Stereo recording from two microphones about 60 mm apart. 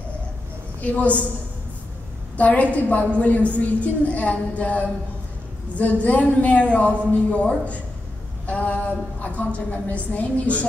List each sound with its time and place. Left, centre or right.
0.7 s a woman's voice: left
2.3 s a woman's voice: left